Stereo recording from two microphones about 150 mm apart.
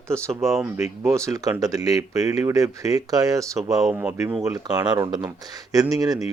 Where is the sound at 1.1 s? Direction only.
20° right (ahead or behind).